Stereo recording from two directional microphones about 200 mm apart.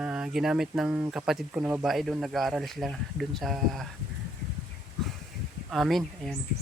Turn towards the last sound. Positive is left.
turn(degrees=0)  # may be behind; listen again after turning